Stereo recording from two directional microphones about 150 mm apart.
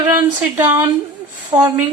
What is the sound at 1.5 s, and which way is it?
Speech, 40° right (ahead or behind).